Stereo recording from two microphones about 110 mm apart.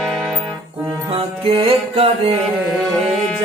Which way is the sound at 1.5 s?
60° right (ahead or behind).